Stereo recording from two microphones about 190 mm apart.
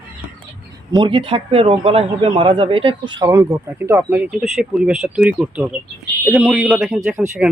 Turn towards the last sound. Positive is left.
turn(degrees=-5)  # may be behind; listen again after turning